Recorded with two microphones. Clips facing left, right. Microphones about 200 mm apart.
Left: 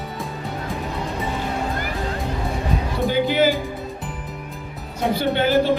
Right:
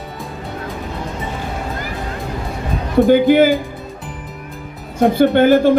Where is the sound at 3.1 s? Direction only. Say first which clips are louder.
Right 7 dB; 50° right (ahead or behind).